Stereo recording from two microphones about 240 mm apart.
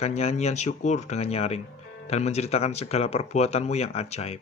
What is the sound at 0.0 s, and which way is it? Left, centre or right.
Speech, left.